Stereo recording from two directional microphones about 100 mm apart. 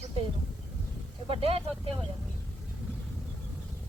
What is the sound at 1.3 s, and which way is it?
Speech, 75° right (ahead or behind).